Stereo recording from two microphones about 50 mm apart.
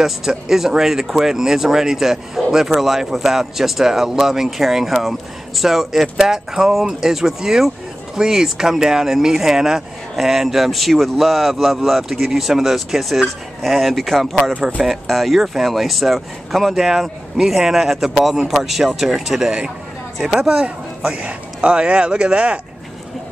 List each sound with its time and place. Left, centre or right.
0.0 s speech: centre
20.5 s speech: right